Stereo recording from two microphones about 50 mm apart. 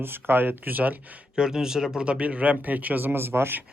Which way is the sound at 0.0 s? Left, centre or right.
Right.